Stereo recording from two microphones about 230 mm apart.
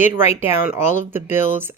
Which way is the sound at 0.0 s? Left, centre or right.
Centre.